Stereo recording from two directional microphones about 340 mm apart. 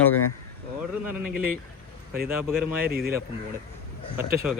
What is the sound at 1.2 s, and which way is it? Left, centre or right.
Speech, right.